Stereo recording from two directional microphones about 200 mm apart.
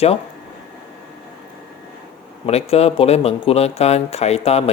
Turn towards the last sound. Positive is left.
turn(degrees=30)  # may be behind; listen again after turning